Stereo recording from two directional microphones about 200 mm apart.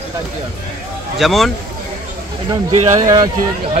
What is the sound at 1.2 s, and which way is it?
Speech, centre (ahead or behind).